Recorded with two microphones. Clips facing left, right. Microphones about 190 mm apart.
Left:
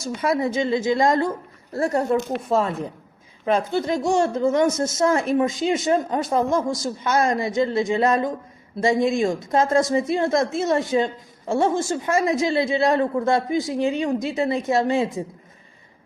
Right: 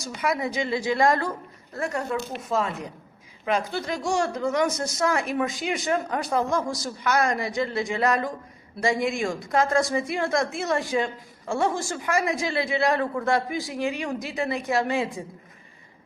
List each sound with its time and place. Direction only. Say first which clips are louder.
0.0 s a woman's voice: left 5 dB; 25° left (ahead or behind)
1.7 s a woman's voice: left 7 dB; 35° left (ahead or behind)